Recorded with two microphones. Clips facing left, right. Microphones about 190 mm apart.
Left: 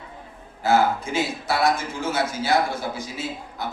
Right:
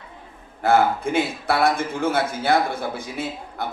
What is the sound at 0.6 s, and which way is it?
A man's voice, 55° right (ahead or behind).